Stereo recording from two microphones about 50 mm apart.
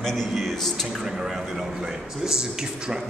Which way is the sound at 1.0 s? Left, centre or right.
Centre.